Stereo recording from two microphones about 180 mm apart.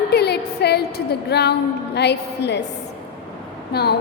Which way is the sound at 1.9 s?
70° left (ahead or behind).